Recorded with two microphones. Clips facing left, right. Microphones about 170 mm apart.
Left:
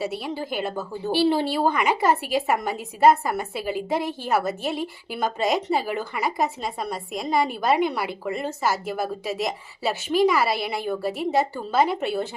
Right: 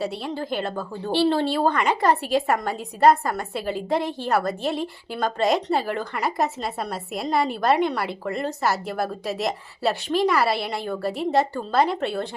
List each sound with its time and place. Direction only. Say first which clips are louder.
0.0 s a woman's voice: even; 5° left (ahead or behind)